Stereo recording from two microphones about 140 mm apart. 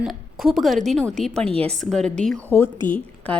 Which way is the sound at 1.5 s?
45° right (ahead or behind).